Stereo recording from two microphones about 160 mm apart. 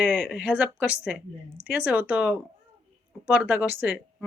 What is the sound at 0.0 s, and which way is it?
A woman's voice, 5° right (ahead or behind).